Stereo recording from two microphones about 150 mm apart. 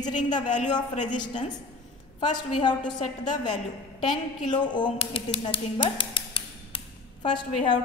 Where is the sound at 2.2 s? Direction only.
30° left (ahead or behind).